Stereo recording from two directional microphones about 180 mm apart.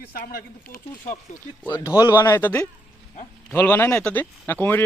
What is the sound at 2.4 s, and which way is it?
Speech, 10° left (ahead or behind).